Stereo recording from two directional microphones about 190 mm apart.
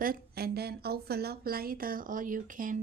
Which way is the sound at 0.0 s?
50° right (ahead or behind).